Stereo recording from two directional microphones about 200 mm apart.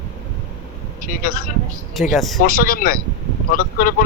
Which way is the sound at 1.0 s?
45° left (ahead or behind).